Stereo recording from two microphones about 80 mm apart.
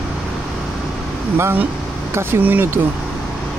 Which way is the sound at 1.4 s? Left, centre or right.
Right.